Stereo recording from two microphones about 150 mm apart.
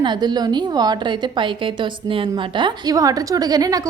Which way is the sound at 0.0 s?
30° right (ahead or behind).